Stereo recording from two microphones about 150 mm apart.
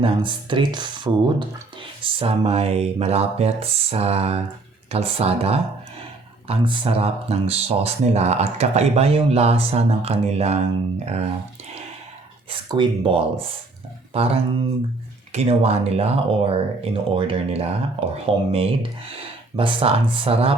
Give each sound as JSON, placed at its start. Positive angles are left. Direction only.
{"t": 0.0, "sound": "speech", "side_deg": -35}
{"t": 12.5, "sound": "speech", "side_deg": -30}